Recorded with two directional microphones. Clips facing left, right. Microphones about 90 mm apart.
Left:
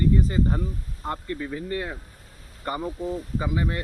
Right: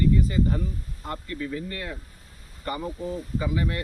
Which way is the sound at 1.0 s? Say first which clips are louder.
Left 2 dB; 30° left (ahead or behind).